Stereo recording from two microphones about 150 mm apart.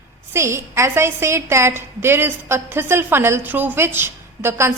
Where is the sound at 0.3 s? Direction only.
20° right (ahead or behind).